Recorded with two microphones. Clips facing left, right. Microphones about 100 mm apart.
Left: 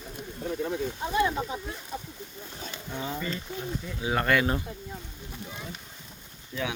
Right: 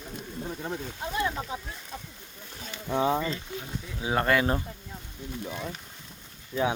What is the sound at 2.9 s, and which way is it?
Speech, 90° right.